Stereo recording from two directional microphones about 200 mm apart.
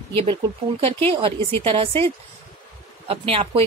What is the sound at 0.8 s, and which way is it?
Speech, 30° right (ahead or behind).